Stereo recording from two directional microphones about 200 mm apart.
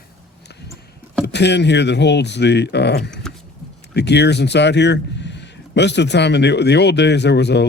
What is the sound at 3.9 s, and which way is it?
Speech, 55° left (ahead or behind).